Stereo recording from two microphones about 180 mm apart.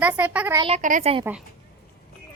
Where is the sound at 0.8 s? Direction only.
45° right (ahead or behind).